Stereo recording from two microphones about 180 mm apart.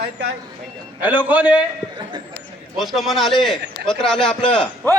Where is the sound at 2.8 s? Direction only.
Centre (ahead or behind).